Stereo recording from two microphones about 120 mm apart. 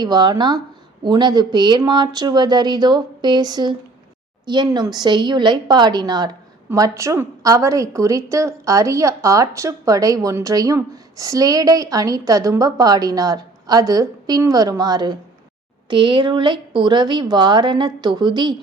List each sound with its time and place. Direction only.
0.0 s a woman's voice: 35° right (ahead or behind)